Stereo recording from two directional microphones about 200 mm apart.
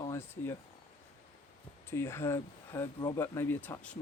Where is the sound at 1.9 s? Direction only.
10° left (ahead or behind).